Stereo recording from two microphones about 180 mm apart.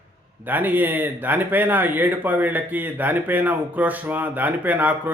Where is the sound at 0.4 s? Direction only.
10° right (ahead or behind).